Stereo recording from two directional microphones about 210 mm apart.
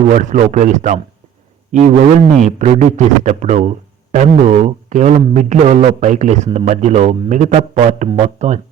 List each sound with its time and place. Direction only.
0.1 s a man's voice: 35° right (ahead or behind)